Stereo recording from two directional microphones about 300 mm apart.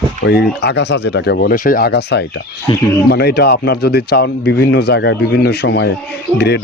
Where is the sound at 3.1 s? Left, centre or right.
Left.